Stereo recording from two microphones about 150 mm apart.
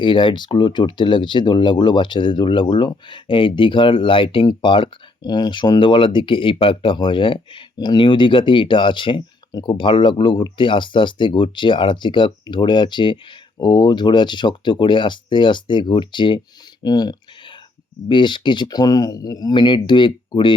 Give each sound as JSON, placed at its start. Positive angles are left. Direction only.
{"t": 0.0, "sound": "speech", "side_deg": 35}
{"t": 16.8, "sound": "a sound", "side_deg": 25}
{"t": 18.1, "sound": "speech", "side_deg": 30}